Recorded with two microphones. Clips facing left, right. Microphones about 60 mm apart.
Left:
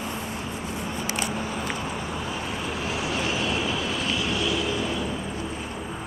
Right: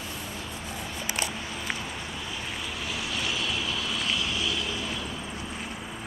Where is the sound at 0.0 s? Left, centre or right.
Left.